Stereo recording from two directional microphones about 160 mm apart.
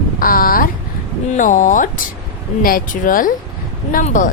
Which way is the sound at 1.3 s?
55° left (ahead or behind).